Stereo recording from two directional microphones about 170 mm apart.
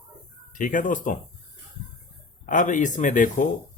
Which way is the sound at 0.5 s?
50° left (ahead or behind).